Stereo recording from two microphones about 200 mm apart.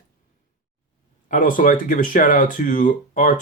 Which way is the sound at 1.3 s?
40° left (ahead or behind).